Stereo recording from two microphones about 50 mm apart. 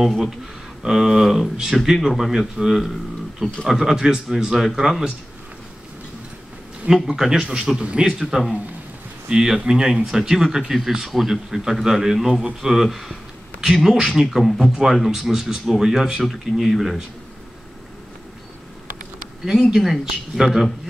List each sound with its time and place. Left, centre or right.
0.0 s a man's voice: centre
7.1 s a man's voice: centre
19.7 s speech: centre